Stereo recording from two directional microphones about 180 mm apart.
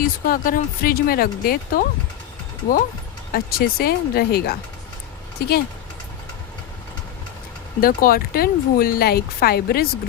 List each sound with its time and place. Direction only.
0.3 s speech: 50° left (ahead or behind)
3.3 s speech: 55° left (ahead or behind)
7.8 s speech: 55° left (ahead or behind)